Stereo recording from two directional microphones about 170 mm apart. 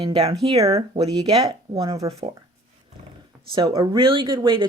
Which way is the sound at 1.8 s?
20° right (ahead or behind).